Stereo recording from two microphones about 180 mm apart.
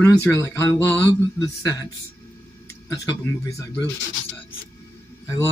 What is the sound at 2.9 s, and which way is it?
Speech, 20° left (ahead or behind).